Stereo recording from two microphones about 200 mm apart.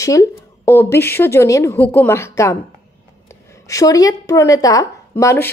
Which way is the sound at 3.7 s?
15° left (ahead or behind).